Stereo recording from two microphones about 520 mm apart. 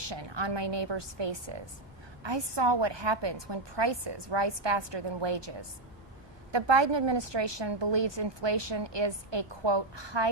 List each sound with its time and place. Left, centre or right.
0.1 s a woman's voice: right